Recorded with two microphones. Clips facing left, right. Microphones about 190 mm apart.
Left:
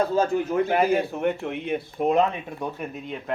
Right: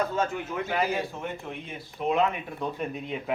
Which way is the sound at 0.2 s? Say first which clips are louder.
Left 5 dB; 35° left (ahead or behind).